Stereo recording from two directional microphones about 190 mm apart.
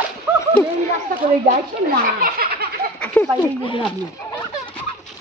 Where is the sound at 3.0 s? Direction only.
10° left (ahead or behind).